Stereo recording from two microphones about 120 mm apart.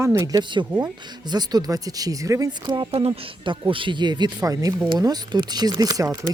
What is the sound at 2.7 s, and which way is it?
Speech, 50° right (ahead or behind).